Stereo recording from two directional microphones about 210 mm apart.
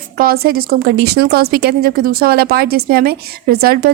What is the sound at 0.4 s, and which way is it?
A woman's voice, 45° right (ahead or behind).